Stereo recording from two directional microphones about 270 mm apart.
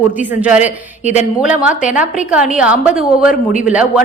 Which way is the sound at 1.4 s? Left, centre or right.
Centre.